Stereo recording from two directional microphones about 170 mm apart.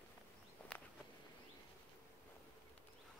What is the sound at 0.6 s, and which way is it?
Walk, 10° left (ahead or behind).